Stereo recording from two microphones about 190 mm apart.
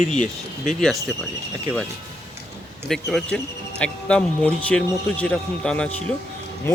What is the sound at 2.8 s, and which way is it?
Speech, centre (ahead or behind).